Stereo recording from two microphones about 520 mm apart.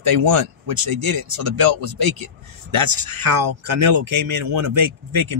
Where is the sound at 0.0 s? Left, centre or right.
Right.